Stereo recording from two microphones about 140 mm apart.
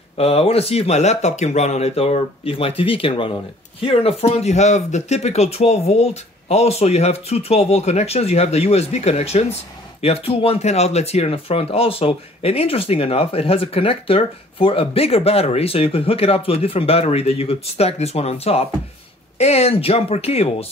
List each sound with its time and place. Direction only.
0.2 s speech: 45° left (ahead or behind)